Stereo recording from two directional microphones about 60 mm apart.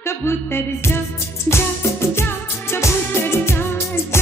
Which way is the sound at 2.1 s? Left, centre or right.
Left.